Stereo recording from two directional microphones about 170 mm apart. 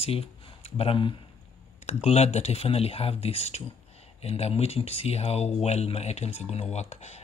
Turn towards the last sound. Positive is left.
turn(degrees=40)  # may be behind; listen again after turning